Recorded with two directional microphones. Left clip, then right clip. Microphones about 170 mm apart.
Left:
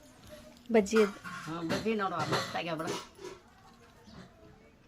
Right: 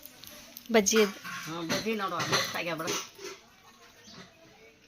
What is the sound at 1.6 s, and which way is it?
Speech, 20° left (ahead or behind).